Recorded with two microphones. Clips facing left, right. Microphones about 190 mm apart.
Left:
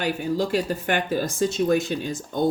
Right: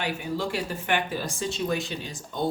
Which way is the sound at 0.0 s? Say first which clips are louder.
Left 5 dB; 40° left (ahead or behind).